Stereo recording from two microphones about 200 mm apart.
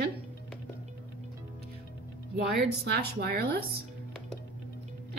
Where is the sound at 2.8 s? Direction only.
50° right (ahead or behind).